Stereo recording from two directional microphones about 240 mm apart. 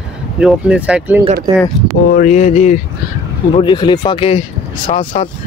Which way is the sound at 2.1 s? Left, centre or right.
Left.